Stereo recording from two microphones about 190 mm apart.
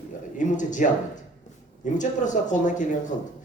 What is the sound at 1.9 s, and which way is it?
Speech, 40° left (ahead or behind).